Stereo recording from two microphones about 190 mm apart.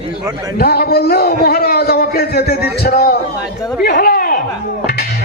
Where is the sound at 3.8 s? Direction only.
55° left (ahead or behind).